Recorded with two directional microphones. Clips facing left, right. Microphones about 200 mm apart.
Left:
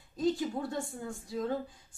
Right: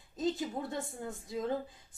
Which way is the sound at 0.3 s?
20° right (ahead or behind).